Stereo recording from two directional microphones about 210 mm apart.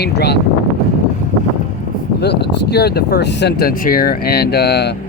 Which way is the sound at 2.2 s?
50° left (ahead or behind).